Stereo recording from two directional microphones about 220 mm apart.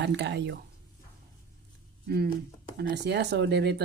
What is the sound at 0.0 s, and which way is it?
Speech, 50° right (ahead or behind).